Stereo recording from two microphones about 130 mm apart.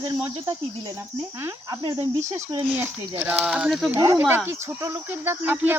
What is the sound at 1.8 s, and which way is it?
Speech, 35° right (ahead or behind).